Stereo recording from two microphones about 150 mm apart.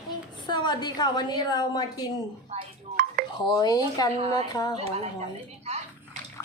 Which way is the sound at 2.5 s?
45° right (ahead or behind).